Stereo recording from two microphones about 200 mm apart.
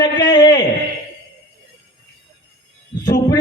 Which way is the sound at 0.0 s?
20° left (ahead or behind).